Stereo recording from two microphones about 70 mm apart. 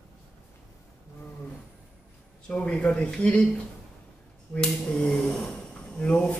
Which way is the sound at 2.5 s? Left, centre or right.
Centre.